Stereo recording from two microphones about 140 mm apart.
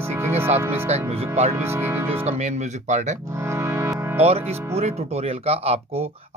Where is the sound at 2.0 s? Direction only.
50° right (ahead or behind).